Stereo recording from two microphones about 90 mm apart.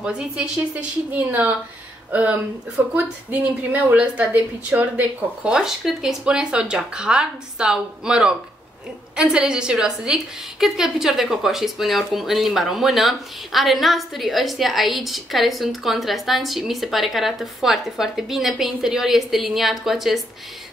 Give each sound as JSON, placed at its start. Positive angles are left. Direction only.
{"t": 0.0, "sound": "a woman's voice", "side_deg": -10}